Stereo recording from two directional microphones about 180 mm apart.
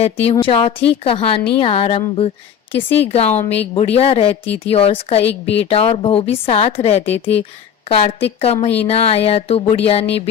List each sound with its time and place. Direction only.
0.0 s a woman's voice: 35° left (ahead or behind)